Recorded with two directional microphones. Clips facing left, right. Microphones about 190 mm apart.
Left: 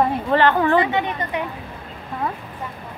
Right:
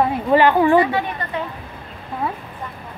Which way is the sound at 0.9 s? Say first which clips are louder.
Left 1 dB; 20° left (ahead or behind).